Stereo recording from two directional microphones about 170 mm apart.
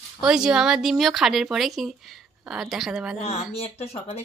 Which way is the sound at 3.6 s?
35° left (ahead or behind).